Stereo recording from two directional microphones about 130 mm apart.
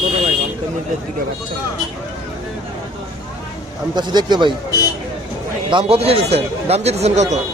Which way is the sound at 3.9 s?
35° right (ahead or behind).